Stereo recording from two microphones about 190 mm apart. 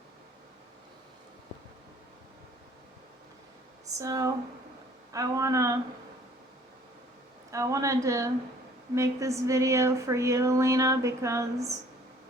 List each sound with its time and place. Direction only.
3.9 s speech: 15° right (ahead or behind)
7.5 s speech: 15° right (ahead or behind)